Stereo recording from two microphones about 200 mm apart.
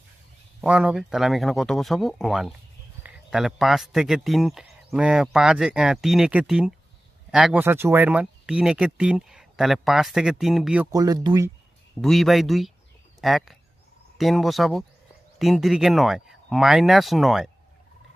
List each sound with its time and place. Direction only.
0.6 s speech: 5° right (ahead or behind)
10.9 s speech: 20° right (ahead or behind)
12.0 s speech: centre (ahead or behind)